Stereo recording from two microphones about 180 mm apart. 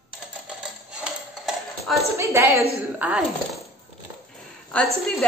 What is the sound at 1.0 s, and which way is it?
Dishes, centre (ahead or behind).